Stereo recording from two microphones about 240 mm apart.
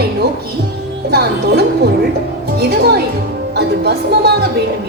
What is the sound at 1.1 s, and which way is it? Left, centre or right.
A woman's voice, right.